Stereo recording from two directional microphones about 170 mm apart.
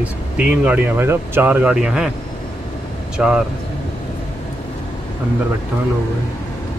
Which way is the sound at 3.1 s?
5° right (ahead or behind).